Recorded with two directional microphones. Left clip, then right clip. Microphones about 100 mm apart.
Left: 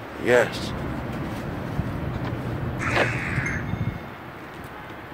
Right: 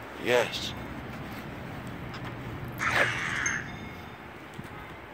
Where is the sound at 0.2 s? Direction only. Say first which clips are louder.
Left 6 dB; 20° left (ahead or behind).